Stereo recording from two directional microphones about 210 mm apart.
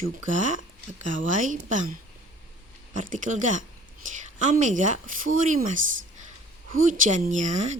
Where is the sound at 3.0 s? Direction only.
35° right (ahead or behind).